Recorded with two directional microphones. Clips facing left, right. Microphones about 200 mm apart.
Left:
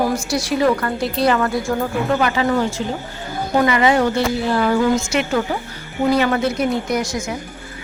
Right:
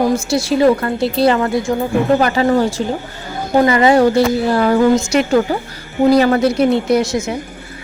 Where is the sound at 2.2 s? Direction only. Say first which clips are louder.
Right 4 dB; 35° right (ahead or behind).